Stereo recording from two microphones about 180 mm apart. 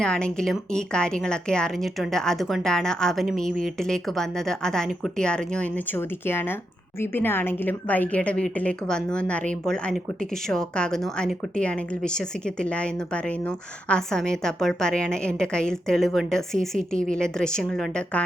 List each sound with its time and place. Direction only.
0.0 s a woman's voice: 5° left (ahead or behind)